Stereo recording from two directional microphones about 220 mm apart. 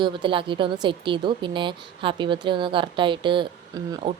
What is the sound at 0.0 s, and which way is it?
Speech, 20° right (ahead or behind).